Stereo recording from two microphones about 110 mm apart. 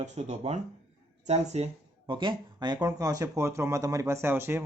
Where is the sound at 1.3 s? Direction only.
75° right (ahead or behind).